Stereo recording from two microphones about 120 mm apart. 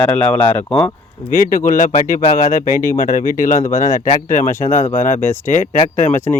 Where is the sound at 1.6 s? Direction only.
90° left.